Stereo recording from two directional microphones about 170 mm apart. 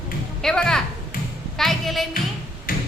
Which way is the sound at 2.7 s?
55° left (ahead or behind).